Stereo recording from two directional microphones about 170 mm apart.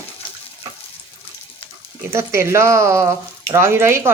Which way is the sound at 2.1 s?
15° right (ahead or behind).